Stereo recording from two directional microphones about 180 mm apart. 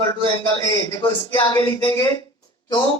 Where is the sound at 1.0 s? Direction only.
30° left (ahead or behind).